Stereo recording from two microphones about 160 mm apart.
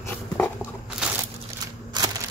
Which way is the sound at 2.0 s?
25° right (ahead or behind).